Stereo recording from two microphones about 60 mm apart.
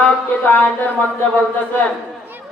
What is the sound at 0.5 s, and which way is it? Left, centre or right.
Mantra, left.